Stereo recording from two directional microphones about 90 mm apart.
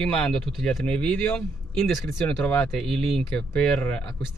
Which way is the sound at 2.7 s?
5° left (ahead or behind).